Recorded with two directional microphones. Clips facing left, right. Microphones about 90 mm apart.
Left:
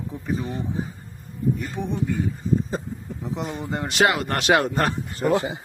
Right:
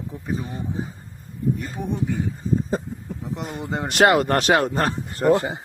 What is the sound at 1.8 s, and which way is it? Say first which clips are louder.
Speech: right 1 dB; 20° right (ahead or behind).